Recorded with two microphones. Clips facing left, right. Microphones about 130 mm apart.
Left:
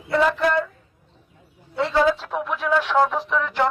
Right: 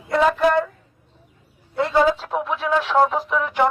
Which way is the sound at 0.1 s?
20° right (ahead or behind).